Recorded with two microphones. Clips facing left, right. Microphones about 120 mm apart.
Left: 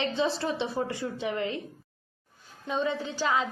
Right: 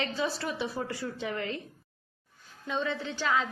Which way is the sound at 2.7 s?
15° left (ahead or behind).